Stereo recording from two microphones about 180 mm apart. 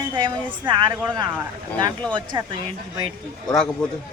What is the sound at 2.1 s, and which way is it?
Speech, 25° right (ahead or behind).